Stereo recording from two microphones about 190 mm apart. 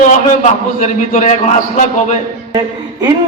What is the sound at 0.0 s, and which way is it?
A man's voice, 40° left (ahead or behind).